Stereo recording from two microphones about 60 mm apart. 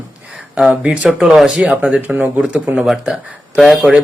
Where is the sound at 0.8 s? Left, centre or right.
Centre.